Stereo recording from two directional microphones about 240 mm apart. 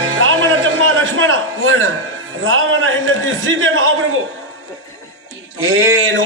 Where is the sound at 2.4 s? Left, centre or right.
Right.